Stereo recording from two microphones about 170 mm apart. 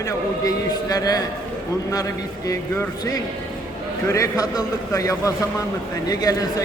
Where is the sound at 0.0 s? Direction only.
20° left (ahead or behind).